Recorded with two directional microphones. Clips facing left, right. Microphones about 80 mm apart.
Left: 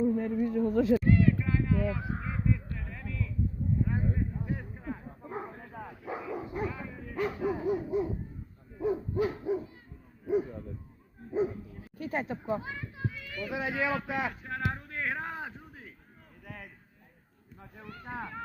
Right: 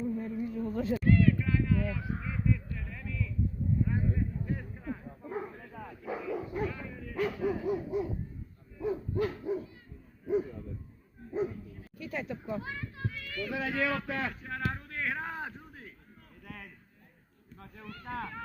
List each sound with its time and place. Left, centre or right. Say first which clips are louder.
0.0 s speech: left 6 dB; left
1.0 s honk: even; centre; by 3.3 s left
3.8 s a sound: even; left
4.5 s bow-wow: even; left
6.1 s dog: right 1 dB; centre
9.0 s hoot: left 2 dB; centre
11.3 s bow-wow: left 3 dB; centre
11.7 s a sound: left 4 dB; left
12.6 s speech: left 1 dB; centre
15.2 s a sound: even; centre
17.6 s speech: even; left